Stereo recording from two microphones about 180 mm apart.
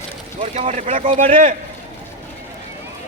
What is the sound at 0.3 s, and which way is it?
Speech, 40° right (ahead or behind).